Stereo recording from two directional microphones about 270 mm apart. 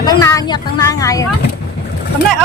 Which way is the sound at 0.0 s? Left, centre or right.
Centre.